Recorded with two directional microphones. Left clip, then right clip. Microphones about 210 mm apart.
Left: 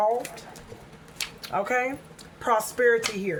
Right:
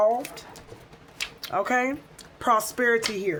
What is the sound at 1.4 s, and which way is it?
Speech, 50° right (ahead or behind).